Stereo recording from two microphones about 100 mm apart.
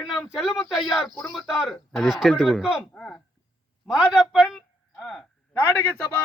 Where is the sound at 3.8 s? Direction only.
5° right (ahead or behind).